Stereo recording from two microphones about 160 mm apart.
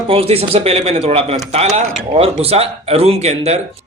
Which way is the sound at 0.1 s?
40° right (ahead or behind).